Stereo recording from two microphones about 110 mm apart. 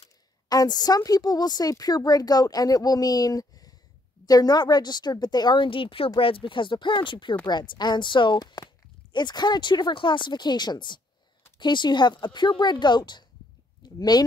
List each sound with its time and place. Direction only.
0.5 s a woman's voice: 35° left (ahead or behind)